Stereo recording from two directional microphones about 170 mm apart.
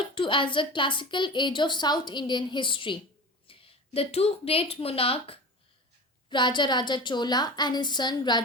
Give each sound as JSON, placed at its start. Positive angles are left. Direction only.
{"t": 0.0, "sound": "a woman's voice", "side_deg": 30}